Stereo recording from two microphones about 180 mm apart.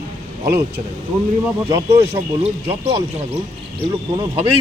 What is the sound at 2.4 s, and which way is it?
Speech, 35° right (ahead or behind).